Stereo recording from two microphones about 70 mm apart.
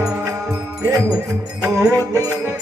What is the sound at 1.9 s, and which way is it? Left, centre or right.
Music, right.